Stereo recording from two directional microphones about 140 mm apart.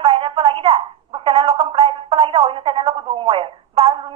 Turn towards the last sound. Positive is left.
turn(degrees=-45)  # may be behind; listen again after turning